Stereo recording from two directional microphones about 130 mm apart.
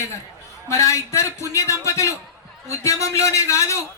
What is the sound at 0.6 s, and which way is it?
A man's voice, 25° left (ahead or behind).